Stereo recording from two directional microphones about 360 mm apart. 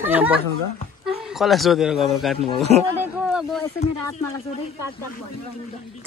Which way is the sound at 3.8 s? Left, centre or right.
Centre.